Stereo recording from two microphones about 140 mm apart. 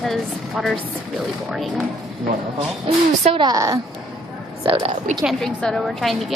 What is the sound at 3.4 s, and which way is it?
Speech, 25° right (ahead or behind).